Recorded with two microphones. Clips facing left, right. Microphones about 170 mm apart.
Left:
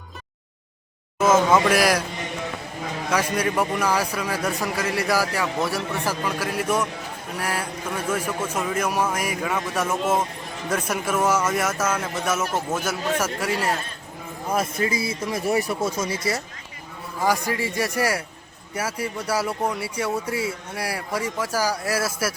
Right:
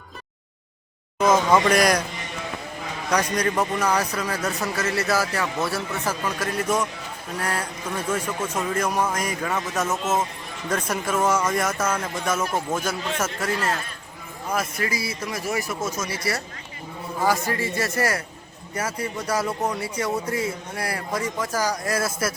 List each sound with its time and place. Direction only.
1.2 s a man's voice: 5° left (ahead or behind)
3.1 s a man's voice: 5° left (ahead or behind)
14.5 s speech: 25° left (ahead or behind)
17.2 s a man's voice: 15° left (ahead or behind)